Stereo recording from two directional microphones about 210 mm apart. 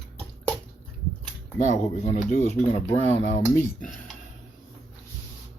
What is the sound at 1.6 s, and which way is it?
Speech, 35° left (ahead or behind).